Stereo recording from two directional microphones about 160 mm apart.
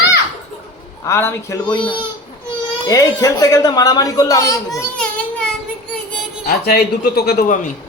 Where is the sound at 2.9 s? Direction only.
20° left (ahead or behind).